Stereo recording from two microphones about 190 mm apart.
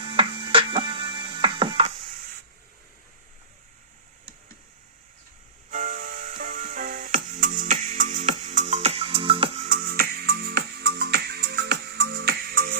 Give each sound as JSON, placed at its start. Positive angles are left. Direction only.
{"t": 0.0, "sound": "music", "side_deg": -25}
{"t": 5.7, "sound": "music", "side_deg": -40}